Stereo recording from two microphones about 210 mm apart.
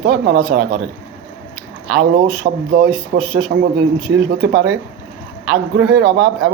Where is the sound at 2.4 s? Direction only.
50° right (ahead or behind).